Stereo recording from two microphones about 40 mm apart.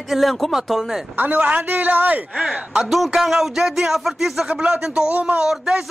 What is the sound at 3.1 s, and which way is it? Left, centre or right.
Speech, centre.